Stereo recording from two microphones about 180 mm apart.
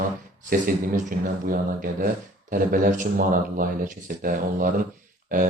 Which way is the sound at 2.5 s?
50° right (ahead or behind).